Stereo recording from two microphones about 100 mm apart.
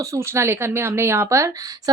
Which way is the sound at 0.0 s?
30° right (ahead or behind).